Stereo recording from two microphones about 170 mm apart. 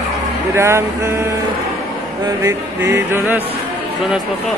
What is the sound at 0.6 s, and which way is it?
Music, 15° right (ahead or behind).